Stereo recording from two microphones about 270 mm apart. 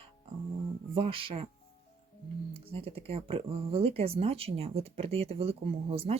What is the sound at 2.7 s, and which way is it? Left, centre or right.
Speech, right.